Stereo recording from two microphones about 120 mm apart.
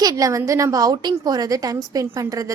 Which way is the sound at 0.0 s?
30° right (ahead or behind).